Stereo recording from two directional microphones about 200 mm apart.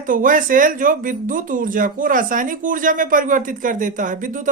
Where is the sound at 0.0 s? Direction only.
40° right (ahead or behind).